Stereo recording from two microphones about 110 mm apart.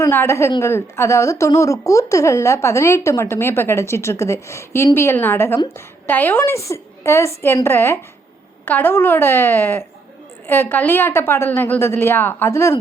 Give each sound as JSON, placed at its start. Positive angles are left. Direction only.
{"t": 0.0, "sound": "speech", "side_deg": 20}